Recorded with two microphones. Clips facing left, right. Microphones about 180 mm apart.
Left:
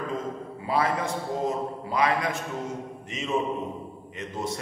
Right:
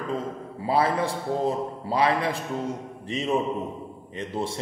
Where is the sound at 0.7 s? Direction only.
30° right (ahead or behind).